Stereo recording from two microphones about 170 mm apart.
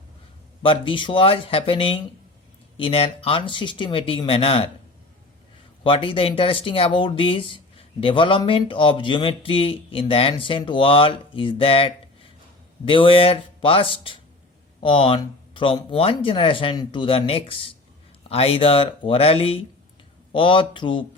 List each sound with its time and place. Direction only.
0.6 s speech: 30° left (ahead or behind)
5.8 s speech: 30° left (ahead or behind)